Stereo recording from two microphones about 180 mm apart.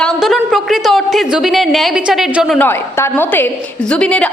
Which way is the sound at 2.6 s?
15° left (ahead or behind).